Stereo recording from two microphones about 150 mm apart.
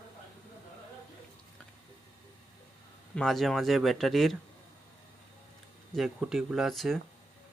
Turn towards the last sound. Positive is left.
turn(degrees=0)  # may be behind; listen again after turning